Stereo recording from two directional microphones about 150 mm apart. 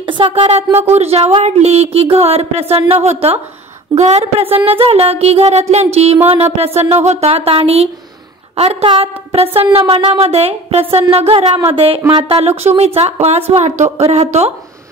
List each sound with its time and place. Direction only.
0.0 s speech: 35° right (ahead or behind)
12.4 s speech: 45° right (ahead or behind)